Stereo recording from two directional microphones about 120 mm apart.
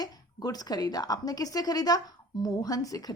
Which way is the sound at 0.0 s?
35° left (ahead or behind).